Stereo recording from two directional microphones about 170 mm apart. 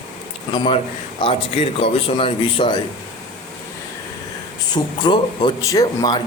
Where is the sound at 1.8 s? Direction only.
30° left (ahead or behind).